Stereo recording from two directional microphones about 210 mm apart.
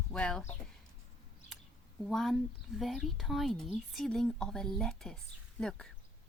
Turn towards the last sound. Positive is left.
turn(degrees=5)  # may be behind; listen again after turning